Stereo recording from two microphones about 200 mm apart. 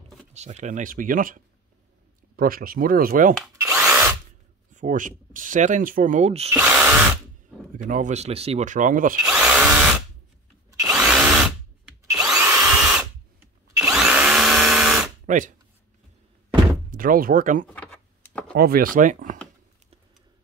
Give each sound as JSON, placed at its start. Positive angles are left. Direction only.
{"t": 0.3, "sound": "speech", "side_deg": -35}
{"t": 3.6, "sound": "drill", "side_deg": -15}
{"t": 4.7, "sound": "speech", "side_deg": -40}
{"t": 6.5, "sound": "drill", "side_deg": -10}
{"t": 7.7, "sound": "speech", "side_deg": -40}
{"t": 9.2, "sound": "drill", "side_deg": -5}
{"t": 15.2, "sound": "speech", "side_deg": -40}
{"t": 16.9, "sound": "speech", "side_deg": -45}
{"t": 17.6, "sound": "typing", "side_deg": 5}
{"t": 18.5, "sound": "speech", "side_deg": -50}